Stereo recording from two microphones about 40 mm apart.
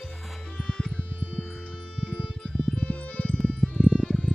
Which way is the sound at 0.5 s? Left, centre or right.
Centre.